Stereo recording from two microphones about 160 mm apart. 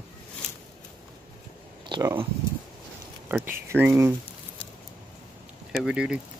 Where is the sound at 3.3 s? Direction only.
15° right (ahead or behind).